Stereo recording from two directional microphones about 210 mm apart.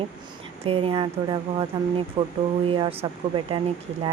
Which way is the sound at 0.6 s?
25° right (ahead or behind).